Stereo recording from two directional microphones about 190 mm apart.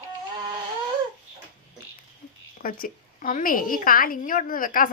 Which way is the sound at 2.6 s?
50° left (ahead or behind).